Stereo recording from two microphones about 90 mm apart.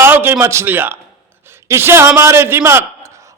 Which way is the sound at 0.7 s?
20° right (ahead or behind).